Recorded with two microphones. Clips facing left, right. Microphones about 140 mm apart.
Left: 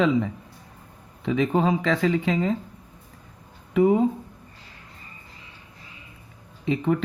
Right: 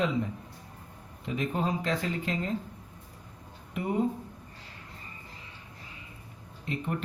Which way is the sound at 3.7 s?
90° left.